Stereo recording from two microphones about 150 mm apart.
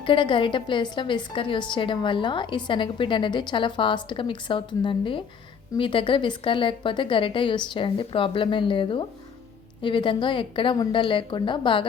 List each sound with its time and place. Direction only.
0.0 s a woman's voice: 35° left (ahead or behind)